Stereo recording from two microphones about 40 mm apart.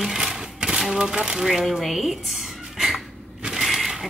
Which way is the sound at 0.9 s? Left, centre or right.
Right.